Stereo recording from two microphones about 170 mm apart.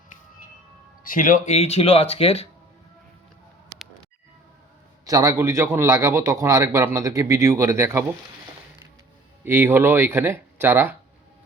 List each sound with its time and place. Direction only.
1.0 s speech: 50° left (ahead or behind); by 2.5 s 35° left (ahead or behind)
5.0 s a man's voice: 20° right (ahead or behind)
9.4 s a man's voice: 10° right (ahead or behind)